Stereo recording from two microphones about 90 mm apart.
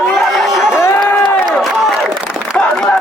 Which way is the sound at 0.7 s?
30° left (ahead or behind).